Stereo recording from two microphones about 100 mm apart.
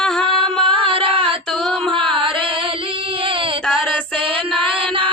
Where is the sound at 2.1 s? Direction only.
60° right (ahead or behind).